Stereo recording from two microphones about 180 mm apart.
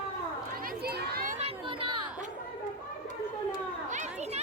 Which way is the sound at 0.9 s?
60° right (ahead or behind).